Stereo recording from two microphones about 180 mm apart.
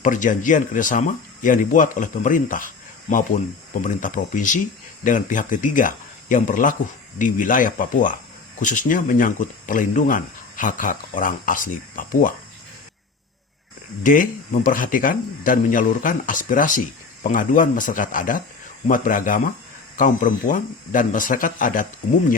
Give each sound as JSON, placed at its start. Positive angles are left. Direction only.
{"t": 0.0, "sound": "speech", "side_deg": 45}
{"t": 14.0, "sound": "speech", "side_deg": 45}